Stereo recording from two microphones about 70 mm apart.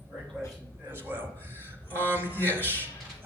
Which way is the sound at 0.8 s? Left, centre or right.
Right.